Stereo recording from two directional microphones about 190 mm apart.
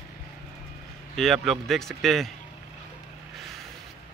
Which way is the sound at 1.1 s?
Centre (ahead or behind).